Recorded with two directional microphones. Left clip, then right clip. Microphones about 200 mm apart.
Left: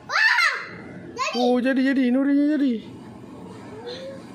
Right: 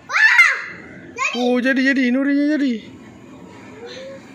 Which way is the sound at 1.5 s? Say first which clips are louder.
Right 4 dB; 5° right (ahead or behind).